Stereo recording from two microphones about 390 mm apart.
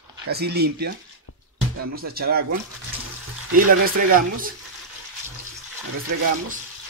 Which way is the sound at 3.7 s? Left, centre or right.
Right.